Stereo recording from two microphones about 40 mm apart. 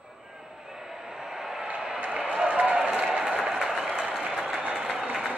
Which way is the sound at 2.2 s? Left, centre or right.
Centre.